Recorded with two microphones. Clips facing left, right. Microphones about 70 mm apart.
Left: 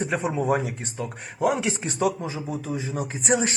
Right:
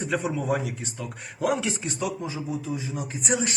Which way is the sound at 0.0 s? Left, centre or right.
Left.